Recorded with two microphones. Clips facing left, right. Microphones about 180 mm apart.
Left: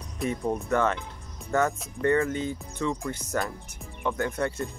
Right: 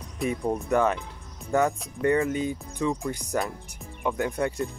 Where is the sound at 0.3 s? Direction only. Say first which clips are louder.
Right 2 dB; 15° right (ahead or behind).